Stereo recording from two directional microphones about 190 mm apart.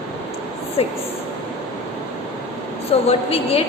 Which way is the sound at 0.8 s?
30° left (ahead or behind).